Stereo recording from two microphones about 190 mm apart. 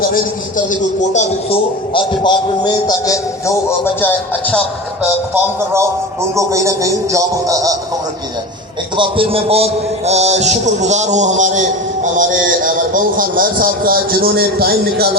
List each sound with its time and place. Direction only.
0.0 s a man's voice: 45° left (ahead or behind); by 3.5 s 20° left (ahead or behind)
4.0 s speech: 10° left (ahead or behind)
5.3 s speech: 15° right (ahead or behind)
9.0 s a man's voice: 30° right (ahead or behind); by 15.1 s 55° right (ahead or behind)